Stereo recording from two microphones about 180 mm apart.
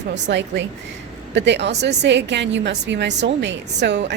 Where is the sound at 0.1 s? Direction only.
80° right.